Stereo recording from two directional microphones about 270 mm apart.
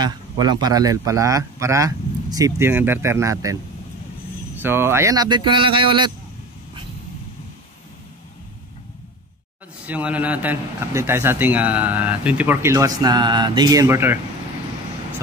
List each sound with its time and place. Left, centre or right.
0.0 s a man's voice: centre
4.6 s a man's voice: centre
9.8 s a man's voice: centre